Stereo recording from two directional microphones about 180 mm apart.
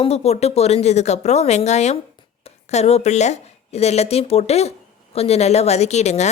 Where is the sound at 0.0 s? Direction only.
35° left (ahead or behind).